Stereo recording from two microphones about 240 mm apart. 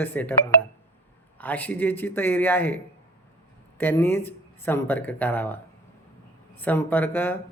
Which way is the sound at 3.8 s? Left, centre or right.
Centre.